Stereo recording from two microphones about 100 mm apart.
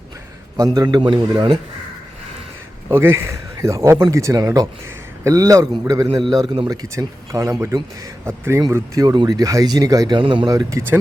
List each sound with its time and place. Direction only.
0.5 s a man's voice: 40° right (ahead or behind)
2.9 s speech: 25° right (ahead or behind)
9.0 s speech: 40° right (ahead or behind)
10.2 s speech: 55° right (ahead or behind)
10.5 s speech: 35° right (ahead or behind)